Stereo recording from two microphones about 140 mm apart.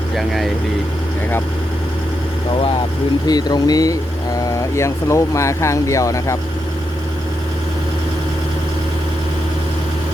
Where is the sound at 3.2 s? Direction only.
30° left (ahead or behind).